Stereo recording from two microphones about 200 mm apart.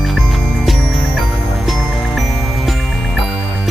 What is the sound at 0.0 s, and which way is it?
Music, centre (ahead or behind).